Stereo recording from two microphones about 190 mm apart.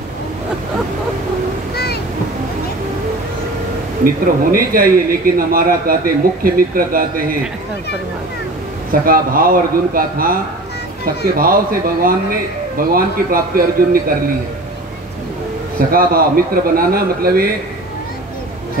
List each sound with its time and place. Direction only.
4.0 s speech: 50° right (ahead or behind)
9.0 s speech: 50° right (ahead or behind)
15.9 s speech: 50° right (ahead or behind)